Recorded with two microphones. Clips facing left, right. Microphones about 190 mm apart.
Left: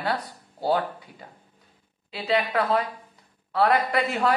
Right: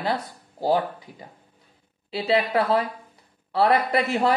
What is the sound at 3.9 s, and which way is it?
Speech, 25° right (ahead or behind).